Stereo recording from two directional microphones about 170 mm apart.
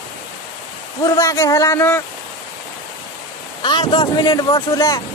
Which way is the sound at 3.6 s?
25° left (ahead or behind).